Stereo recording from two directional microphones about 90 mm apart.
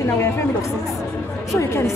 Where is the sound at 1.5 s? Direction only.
35° left (ahead or behind).